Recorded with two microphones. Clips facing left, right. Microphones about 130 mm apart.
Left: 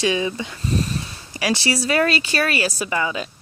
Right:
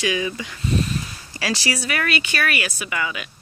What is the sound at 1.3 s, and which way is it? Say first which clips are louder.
Speech: left 3 dB; 20° left (ahead or behind).